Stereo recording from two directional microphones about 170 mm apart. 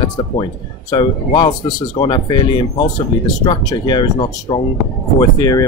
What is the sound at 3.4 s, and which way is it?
Speech, 25° left (ahead or behind).